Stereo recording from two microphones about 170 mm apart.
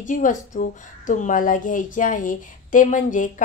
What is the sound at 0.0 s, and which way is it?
A woman's voice, 50° left (ahead or behind).